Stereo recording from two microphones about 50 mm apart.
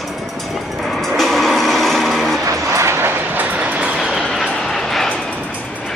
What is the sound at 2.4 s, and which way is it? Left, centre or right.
Vehicle, right.